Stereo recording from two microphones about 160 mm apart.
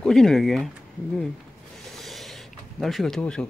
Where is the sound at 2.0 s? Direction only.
Centre (ahead or behind).